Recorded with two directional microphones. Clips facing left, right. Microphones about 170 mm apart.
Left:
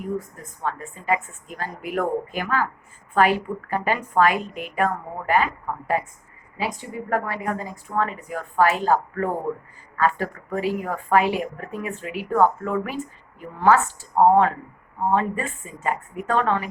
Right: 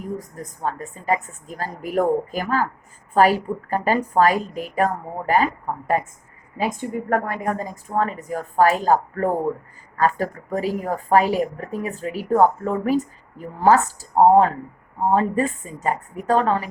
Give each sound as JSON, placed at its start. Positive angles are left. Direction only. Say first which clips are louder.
{"t": 0.2, "sound": "a woman's voice", "louder": "right 2 dB", "side_deg": -40}